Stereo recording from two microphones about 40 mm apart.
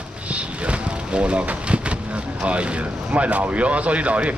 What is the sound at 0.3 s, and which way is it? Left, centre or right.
Vehicle, right.